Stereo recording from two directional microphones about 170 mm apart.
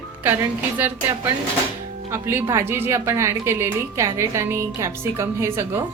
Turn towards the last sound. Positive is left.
turn(degrees=-15)  # may be behind; listen again after turning